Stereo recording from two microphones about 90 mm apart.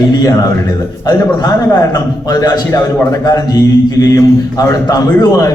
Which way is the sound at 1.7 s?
40° left (ahead or behind).